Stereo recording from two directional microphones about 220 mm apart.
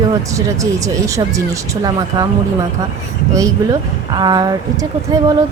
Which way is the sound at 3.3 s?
15° right (ahead or behind).